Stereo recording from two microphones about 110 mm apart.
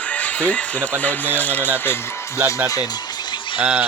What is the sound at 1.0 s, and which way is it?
Speech, 15° left (ahead or behind).